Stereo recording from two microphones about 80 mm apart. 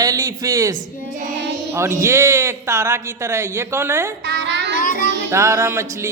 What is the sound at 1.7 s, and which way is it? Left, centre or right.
A man's voice, right.